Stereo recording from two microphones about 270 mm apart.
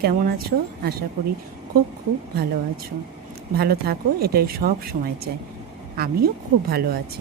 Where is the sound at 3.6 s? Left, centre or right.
Right.